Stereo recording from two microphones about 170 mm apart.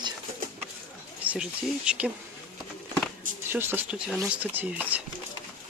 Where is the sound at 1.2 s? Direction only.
5° right (ahead or behind).